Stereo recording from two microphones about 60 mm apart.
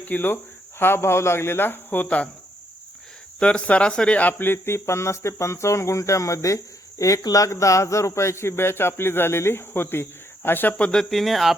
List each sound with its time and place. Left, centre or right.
0.0 s speech: left
2.0 s cricket: left
3.4 s speech: centre; by 6.6 s left
7.0 s speech: left
10.9 s speech: centre